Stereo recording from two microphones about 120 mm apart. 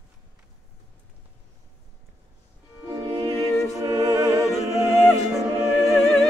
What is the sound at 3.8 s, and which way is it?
Music, 30° right (ahead or behind).